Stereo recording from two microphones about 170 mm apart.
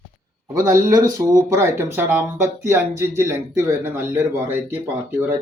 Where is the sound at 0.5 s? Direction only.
20° right (ahead or behind).